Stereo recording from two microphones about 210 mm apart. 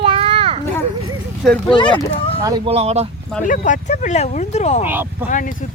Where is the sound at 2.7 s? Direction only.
30° right (ahead or behind).